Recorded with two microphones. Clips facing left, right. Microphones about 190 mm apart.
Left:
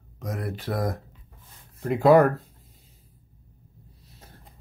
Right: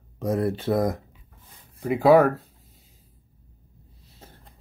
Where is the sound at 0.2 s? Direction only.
30° right (ahead or behind).